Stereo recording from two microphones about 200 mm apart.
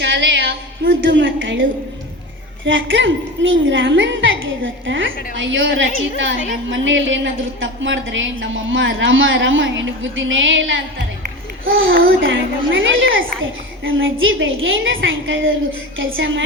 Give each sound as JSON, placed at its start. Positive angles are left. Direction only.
{"t": 0.0, "sound": "female singing", "side_deg": -65}
{"t": 0.9, "sound": "a woman's voice", "side_deg": -70}
{"t": 2.6, "sound": "a woman's voice", "side_deg": -70}